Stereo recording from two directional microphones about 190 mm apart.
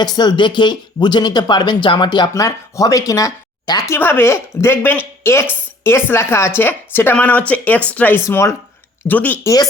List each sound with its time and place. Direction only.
0.0 s speech: 20° left (ahead or behind)